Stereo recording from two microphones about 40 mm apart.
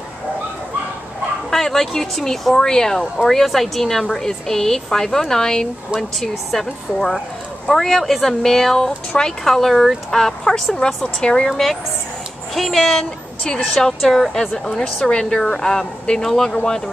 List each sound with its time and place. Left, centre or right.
1.5 s speech: centre
11.5 s speech: centre
13.4 s a woman's voice: left
13.7 s speech: centre
15.0 s speech: centre